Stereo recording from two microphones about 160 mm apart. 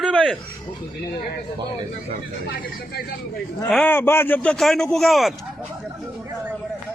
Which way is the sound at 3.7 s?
5° left (ahead or behind).